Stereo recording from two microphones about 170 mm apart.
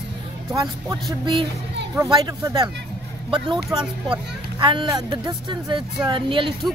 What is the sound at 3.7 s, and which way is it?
Speech, 25° right (ahead or behind).